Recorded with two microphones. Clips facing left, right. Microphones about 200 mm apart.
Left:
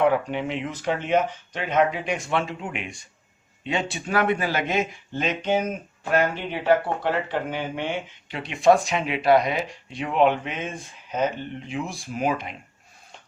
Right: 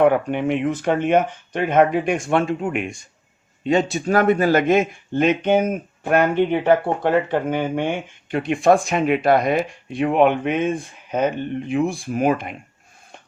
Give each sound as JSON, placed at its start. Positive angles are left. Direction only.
{"t": 0.0, "sound": "speech", "side_deg": -55}